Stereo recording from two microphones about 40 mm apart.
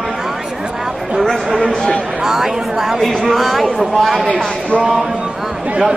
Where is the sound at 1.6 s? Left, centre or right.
Centre.